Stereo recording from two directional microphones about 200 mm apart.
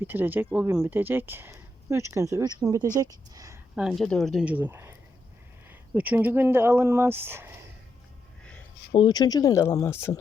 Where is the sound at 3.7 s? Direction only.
Centre (ahead or behind).